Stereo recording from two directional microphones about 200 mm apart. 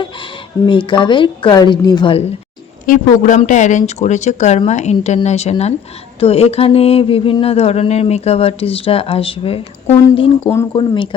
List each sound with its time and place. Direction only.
0.7 s speech: 25° left (ahead or behind)
2.8 s speech: 40° left (ahead or behind)
10.4 s speech: 15° left (ahead or behind)
10.8 s speech: 25° left (ahead or behind)